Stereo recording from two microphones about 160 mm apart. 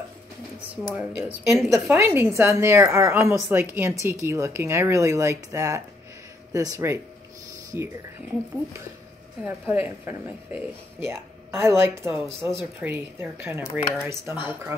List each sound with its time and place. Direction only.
0.9 s speech: 15° right (ahead or behind)
9.4 s speech: 10° right (ahead or behind)